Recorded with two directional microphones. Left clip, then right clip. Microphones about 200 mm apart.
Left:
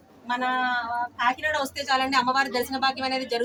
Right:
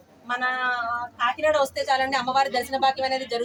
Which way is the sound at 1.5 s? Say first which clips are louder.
Right 3 dB; 5° right (ahead or behind).